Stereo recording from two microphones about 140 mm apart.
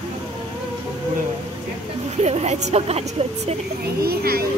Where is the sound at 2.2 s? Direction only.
50° right (ahead or behind).